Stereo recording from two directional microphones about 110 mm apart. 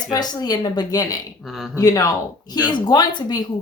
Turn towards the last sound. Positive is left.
turn(degrees=40)  # may be behind; listen again after turning